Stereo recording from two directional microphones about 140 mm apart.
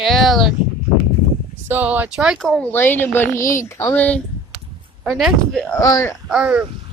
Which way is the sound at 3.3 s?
75° left (ahead or behind).